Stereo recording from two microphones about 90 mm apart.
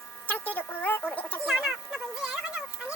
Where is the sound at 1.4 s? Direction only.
5° right (ahead or behind).